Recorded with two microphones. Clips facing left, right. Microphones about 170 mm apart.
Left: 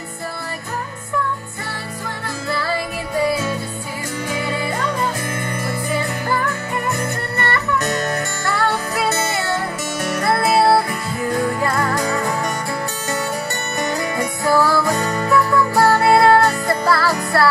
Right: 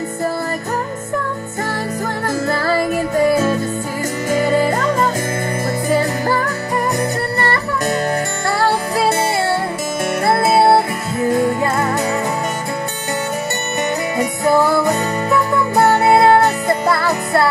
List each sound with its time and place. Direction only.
2.2 s music: 45° right (ahead or behind); by 12.2 s 25° right (ahead or behind)
14.1 s music: 20° right (ahead or behind)